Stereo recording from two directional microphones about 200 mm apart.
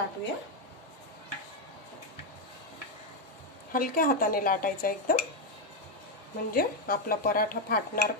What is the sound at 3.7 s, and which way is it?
Speech, 45° left (ahead or behind).